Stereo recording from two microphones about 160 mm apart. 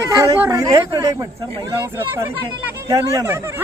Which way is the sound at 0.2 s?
15° right (ahead or behind).